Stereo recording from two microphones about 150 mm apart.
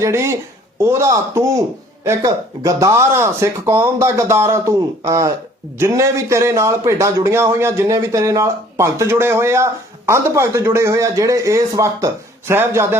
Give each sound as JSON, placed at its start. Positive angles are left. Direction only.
{"t": 0.0, "sound": "speech", "side_deg": -20}